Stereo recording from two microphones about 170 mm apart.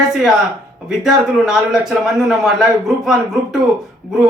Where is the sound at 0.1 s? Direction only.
5° right (ahead or behind).